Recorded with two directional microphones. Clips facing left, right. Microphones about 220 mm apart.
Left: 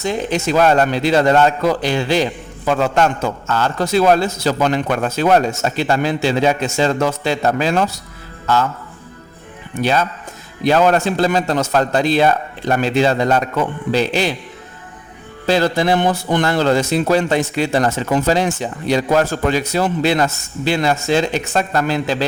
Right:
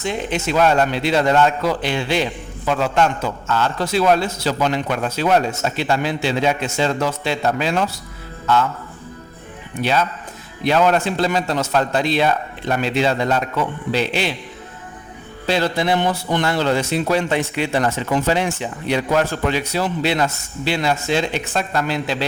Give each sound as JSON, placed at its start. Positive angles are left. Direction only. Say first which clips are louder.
{"t": 0.0, "sound": "a man's voice", "louder": "left 3 dB", "side_deg": 40}
{"t": 9.8, "sound": "a man's voice", "louder": "left 2 dB", "side_deg": 45}
{"t": 15.4, "sound": "a man's voice", "louder": "left 4 dB", "side_deg": 40}